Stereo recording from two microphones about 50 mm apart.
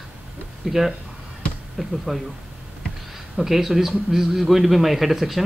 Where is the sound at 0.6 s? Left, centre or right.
Centre.